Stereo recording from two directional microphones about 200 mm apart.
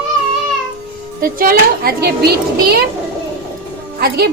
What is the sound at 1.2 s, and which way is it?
A woman's voice, 45° right (ahead or behind).